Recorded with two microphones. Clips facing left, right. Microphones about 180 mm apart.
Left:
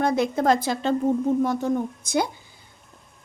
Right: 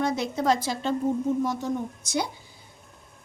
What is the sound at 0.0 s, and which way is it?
Speech, 55° left (ahead or behind).